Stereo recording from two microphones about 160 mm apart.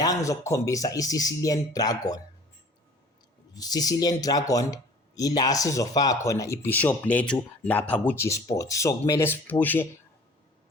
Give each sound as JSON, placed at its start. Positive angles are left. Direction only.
{"t": 0.0, "sound": "speech", "side_deg": 20}
{"t": 3.5, "sound": "speech", "side_deg": 25}